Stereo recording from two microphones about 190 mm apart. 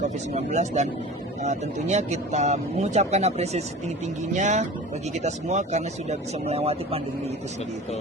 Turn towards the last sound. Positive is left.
turn(degrees=-30)  # may be behind; listen again after turning